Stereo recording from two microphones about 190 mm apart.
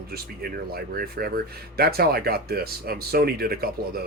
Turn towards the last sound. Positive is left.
turn(degrees=-55)  # may be behind; listen again after turning